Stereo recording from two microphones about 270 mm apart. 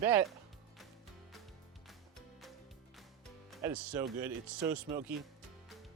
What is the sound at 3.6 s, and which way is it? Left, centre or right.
Speech, centre.